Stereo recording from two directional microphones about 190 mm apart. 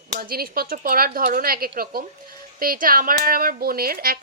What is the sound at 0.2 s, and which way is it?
Speech, 50° right (ahead or behind).